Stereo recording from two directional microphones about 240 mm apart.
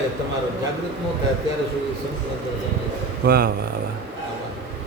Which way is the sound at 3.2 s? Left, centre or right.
Right.